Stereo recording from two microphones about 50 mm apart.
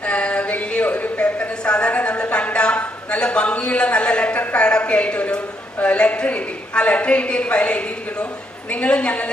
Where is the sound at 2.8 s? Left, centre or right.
Left.